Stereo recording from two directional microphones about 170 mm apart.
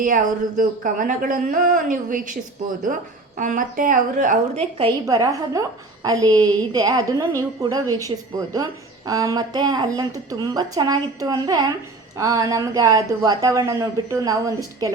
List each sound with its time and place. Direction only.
0.0 s speech: 50° right (ahead or behind)
5.0 s speech: 20° right (ahead or behind)